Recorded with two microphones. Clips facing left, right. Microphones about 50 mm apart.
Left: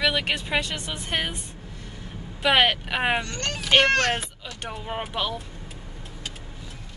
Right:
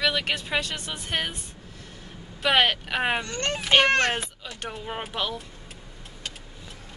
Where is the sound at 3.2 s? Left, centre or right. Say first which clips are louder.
Right 1 dB; right.